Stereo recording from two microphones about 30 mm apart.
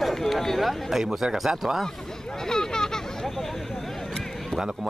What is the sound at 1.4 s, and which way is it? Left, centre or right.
Speech, centre.